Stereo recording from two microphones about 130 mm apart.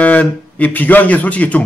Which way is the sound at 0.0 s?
10° left (ahead or behind).